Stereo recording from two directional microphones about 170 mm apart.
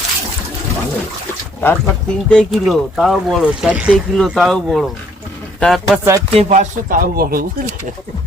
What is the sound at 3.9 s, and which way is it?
Speech, 5° left (ahead or behind).